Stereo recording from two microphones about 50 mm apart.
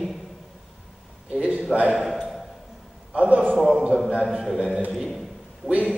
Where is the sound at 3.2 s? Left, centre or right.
Right.